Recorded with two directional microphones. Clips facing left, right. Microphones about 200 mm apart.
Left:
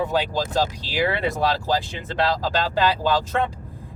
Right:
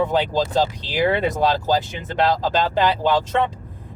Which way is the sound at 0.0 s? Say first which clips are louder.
Right 3 dB; 20° right (ahead or behind).